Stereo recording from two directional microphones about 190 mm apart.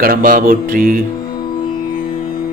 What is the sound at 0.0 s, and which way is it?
Speech, 50° right (ahead or behind).